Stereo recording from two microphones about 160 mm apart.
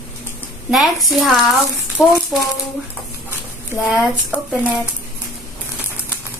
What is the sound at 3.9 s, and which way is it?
Child singing, 5° right (ahead or behind).